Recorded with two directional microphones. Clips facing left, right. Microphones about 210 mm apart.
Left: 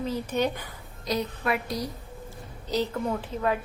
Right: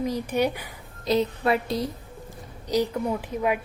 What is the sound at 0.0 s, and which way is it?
Speech, 15° right (ahead or behind).